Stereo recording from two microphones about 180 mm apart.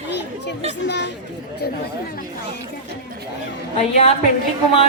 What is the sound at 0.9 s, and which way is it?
Speech, 70° left (ahead or behind).